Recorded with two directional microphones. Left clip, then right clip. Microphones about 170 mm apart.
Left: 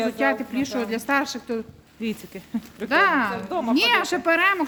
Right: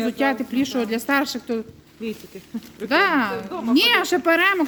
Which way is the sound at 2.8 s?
30° right (ahead or behind).